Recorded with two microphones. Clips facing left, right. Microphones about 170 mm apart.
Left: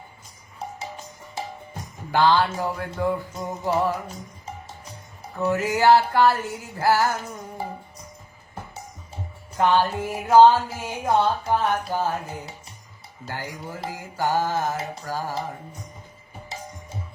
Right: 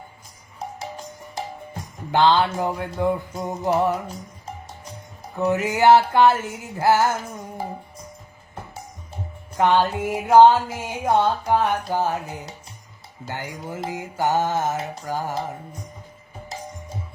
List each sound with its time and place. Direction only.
2.1 s mantra: 20° right (ahead or behind)
5.4 s mantra: 20° right (ahead or behind)
9.6 s speech: 20° right (ahead or behind)
13.2 s mantra: 20° right (ahead or behind)